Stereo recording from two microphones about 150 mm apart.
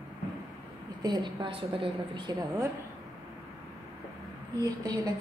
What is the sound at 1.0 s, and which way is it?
A woman's voice, 30° right (ahead or behind).